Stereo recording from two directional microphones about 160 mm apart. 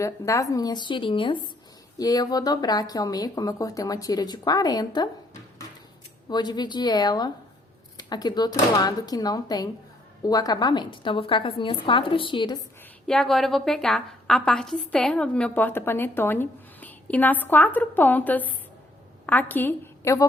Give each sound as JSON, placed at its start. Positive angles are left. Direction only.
{"t": 0.0, "sound": "speech", "side_deg": 20}
{"t": 6.2, "sound": "a woman's voice", "side_deg": 25}
{"t": 13.1, "sound": "a woman's voice", "side_deg": 5}